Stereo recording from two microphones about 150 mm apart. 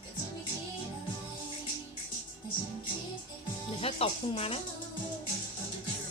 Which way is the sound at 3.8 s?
40° left (ahead or behind).